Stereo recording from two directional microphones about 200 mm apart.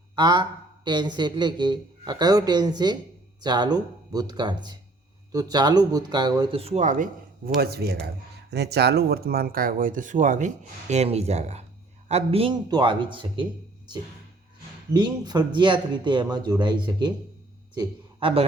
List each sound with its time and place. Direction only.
0.2 s a man's voice: 20° right (ahead or behind)